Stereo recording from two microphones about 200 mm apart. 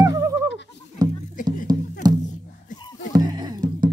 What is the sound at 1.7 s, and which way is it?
Music, 20° right (ahead or behind).